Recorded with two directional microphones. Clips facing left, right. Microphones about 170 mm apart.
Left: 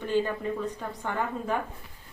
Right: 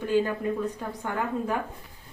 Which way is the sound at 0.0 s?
10° right (ahead or behind).